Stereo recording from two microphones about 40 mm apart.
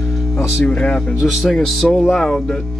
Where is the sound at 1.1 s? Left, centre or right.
Centre.